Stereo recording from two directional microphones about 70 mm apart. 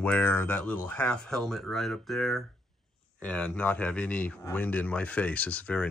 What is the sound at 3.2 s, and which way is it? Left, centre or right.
Speech, centre.